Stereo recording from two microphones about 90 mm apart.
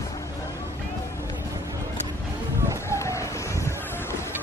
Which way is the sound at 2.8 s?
35° left (ahead or behind).